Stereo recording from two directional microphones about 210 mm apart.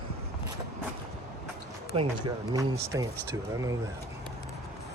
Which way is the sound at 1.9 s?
25° right (ahead or behind).